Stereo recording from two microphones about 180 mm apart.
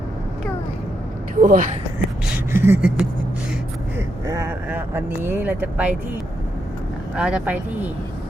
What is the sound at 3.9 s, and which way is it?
Speech, 15° right (ahead or behind).